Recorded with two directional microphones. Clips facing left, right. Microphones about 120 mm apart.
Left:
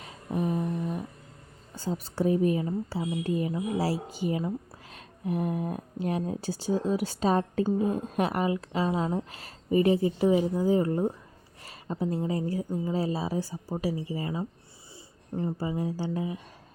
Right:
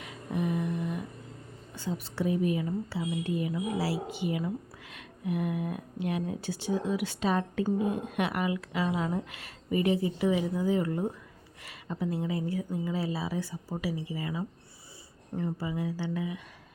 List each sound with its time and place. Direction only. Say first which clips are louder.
0.0 s a sound: left 2 dB; 35° left (ahead or behind)
1.7 s speech: left 3 dB; 40° left (ahead or behind)
15.5 s speech: left 3 dB; 35° left (ahead or behind)